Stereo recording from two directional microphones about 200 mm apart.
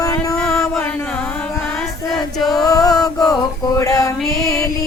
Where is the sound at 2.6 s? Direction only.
20° left (ahead or behind).